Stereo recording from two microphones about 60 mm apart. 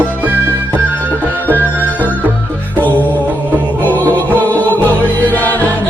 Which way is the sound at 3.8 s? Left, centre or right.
Left.